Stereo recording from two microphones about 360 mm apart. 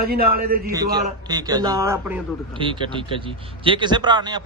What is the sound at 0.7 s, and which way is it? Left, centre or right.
A man's voice, centre.